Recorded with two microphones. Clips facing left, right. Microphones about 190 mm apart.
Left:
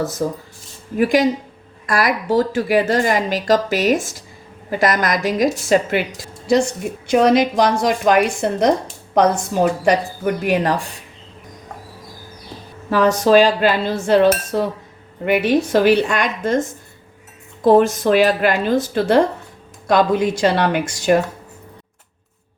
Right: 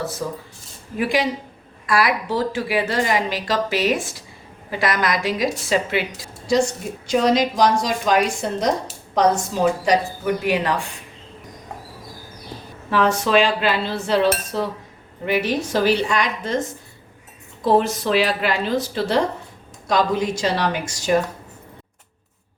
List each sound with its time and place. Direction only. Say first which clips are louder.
0.2 s speech: left 6 dB; 45° left (ahead or behind)
7.1 s a woman's voice: left 4 dB; 60° left (ahead or behind)
12.9 s dishes: left 5 dB; 40° left (ahead or behind)
15.2 s a woman's voice: left 5 dB; 60° left (ahead or behind)